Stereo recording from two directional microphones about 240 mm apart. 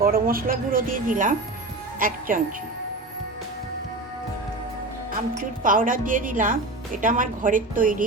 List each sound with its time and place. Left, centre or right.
0.0 s speech: right
5.4 s speech: right